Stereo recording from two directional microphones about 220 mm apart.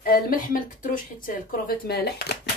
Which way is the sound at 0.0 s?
40° left (ahead or behind).